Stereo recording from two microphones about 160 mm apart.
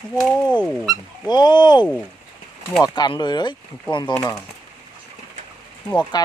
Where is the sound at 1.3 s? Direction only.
25° left (ahead or behind).